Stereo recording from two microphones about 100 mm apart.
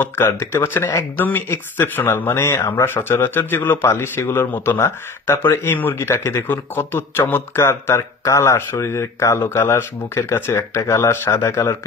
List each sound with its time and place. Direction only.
0.0 s speech: 25° left (ahead or behind)